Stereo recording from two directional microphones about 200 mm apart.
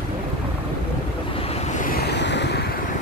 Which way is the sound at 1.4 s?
30° left (ahead or behind).